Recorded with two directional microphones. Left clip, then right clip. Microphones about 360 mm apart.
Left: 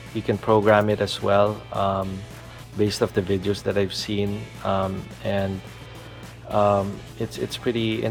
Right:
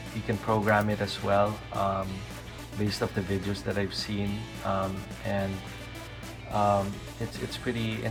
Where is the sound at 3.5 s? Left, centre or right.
Left.